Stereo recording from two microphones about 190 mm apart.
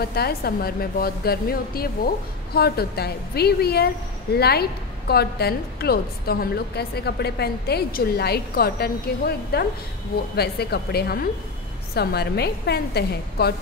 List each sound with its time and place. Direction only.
0.0 s a woman's voice: 55° left (ahead or behind)